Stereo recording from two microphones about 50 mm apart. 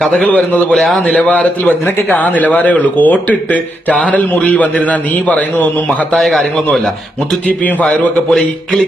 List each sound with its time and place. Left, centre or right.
0.3 s speech: left
0.7 s a man's voice: centre
1.0 s speech: left
6.1 s a man's voice: centre
7.4 s speech: left